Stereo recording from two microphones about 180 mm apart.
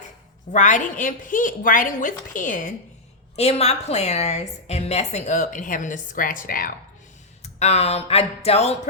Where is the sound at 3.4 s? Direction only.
35° left (ahead or behind).